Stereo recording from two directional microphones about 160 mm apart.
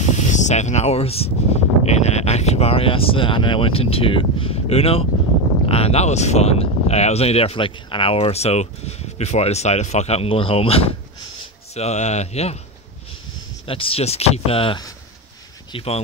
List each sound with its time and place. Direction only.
0.3 s speech: 50° left (ahead or behind)
13.7 s speech: 35° left (ahead or behind)